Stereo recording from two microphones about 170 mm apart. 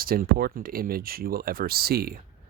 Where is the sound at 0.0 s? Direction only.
60° right (ahead or behind).